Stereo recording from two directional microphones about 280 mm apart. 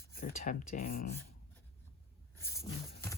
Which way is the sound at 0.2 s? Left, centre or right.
Left.